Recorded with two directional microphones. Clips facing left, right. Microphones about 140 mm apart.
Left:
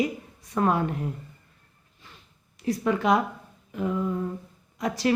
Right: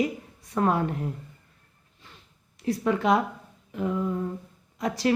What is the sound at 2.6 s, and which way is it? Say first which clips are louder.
Speech: even; 30° right (ahead or behind).